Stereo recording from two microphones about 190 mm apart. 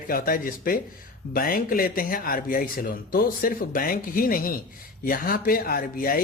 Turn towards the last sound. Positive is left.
turn(degrees=50)  # may be behind; listen again after turning